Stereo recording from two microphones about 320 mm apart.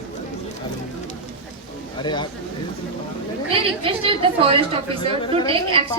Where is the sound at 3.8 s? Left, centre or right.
Centre.